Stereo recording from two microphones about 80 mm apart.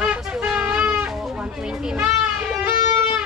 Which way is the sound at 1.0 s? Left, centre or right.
Centre.